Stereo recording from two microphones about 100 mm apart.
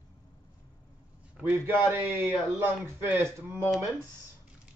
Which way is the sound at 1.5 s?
20° right (ahead or behind).